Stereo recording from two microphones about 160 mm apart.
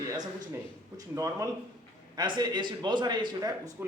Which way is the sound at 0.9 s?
20° right (ahead or behind).